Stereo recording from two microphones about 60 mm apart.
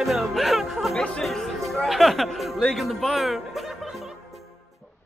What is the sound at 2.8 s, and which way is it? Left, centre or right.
Music, centre.